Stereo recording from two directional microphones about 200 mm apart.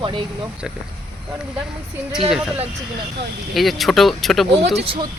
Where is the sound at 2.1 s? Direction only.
Centre (ahead or behind).